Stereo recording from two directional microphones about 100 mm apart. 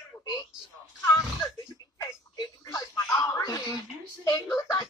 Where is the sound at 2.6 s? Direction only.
35° left (ahead or behind).